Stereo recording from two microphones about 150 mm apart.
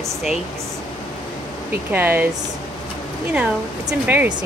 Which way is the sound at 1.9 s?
10° right (ahead or behind).